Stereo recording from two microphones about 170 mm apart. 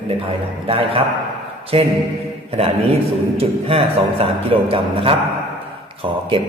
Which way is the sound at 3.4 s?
35° right (ahead or behind).